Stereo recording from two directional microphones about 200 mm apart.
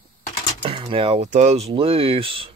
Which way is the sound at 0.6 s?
25° right (ahead or behind).